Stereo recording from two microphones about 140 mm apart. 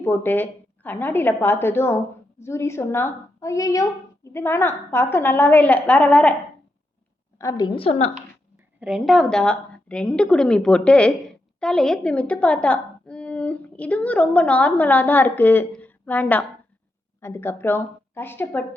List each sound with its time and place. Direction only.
0.0 s a woman's voice: 15° left (ahead or behind)
7.3 s a woman's voice: 25° left (ahead or behind)
7.8 s a woman's voice: 45° left (ahead or behind)
8.8 s a woman's voice: 5° right (ahead or behind); by 18.8 s 10° left (ahead or behind)